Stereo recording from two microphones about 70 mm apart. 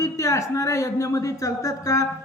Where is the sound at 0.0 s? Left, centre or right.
Left.